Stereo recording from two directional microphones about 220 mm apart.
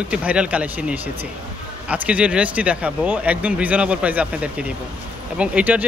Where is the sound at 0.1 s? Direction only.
5° right (ahead or behind).